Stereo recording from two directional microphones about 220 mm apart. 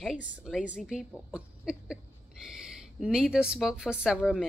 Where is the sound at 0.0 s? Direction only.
Centre (ahead or behind).